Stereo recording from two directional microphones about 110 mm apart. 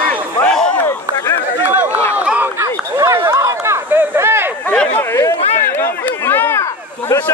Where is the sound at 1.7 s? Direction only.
20° right (ahead or behind).